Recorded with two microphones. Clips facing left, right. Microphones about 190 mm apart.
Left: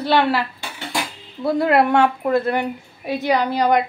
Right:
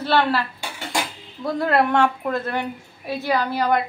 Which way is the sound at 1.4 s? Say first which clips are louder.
Left 4 dB; 10° left (ahead or behind).